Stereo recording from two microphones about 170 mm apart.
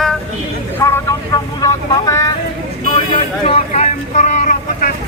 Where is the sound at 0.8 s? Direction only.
15° left (ahead or behind).